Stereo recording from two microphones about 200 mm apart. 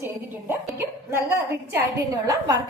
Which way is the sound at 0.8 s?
15° right (ahead or behind).